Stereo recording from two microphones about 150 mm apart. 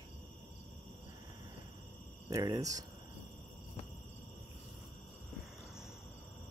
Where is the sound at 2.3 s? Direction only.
25° right (ahead or behind).